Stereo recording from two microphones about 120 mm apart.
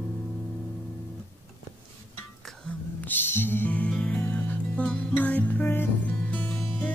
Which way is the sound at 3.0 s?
15° left (ahead or behind).